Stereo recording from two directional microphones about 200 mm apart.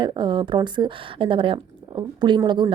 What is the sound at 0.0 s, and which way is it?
Speech, 25° right (ahead or behind).